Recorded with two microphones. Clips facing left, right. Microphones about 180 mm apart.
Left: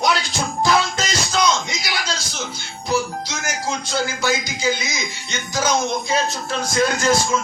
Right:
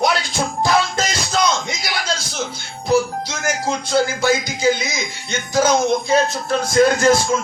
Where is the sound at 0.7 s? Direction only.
50° right (ahead or behind).